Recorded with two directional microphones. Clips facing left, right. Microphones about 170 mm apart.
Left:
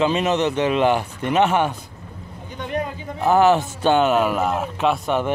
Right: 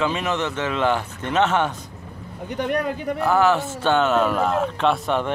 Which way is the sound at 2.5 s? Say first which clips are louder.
Right 3 dB; 70° right (ahead or behind).